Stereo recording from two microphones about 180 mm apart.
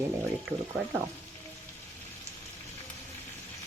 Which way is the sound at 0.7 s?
15° right (ahead or behind).